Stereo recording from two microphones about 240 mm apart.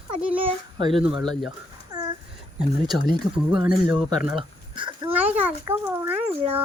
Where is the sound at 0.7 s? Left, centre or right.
Right.